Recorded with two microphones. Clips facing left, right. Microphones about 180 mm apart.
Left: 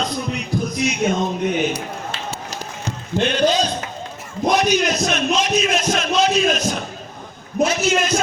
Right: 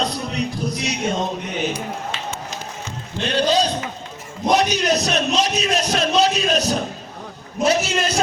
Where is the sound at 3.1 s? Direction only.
45° left (ahead or behind).